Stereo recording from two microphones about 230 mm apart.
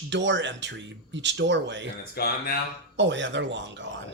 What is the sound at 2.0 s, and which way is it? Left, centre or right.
Speech, left.